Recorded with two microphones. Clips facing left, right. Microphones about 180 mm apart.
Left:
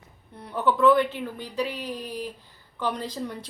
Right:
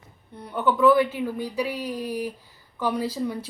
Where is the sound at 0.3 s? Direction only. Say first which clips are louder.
Right 1 dB; centre (ahead or behind).